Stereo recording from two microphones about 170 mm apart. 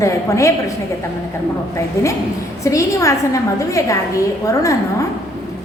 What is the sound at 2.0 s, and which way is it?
A woman's voice, 15° left (ahead or behind).